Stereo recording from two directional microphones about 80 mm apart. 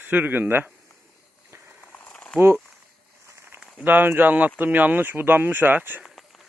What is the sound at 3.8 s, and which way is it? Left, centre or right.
Speech, right.